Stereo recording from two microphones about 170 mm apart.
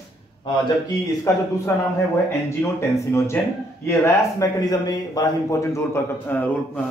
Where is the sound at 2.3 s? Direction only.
15° left (ahead or behind).